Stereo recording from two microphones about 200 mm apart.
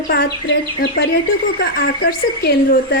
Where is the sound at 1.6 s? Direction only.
50° left (ahead or behind).